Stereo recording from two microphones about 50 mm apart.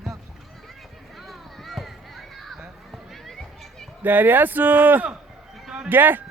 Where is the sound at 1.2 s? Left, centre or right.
Centre.